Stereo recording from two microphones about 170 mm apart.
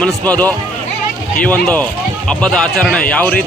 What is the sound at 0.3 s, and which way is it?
Speech, 10° left (ahead or behind).